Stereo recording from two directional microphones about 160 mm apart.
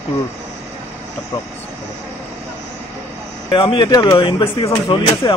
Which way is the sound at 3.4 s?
30° left (ahead or behind).